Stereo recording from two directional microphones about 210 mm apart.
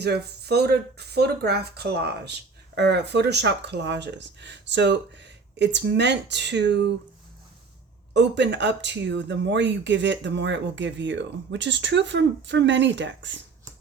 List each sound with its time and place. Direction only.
0.0 s speech: 50° right (ahead or behind)
8.1 s speech: 55° right (ahead or behind)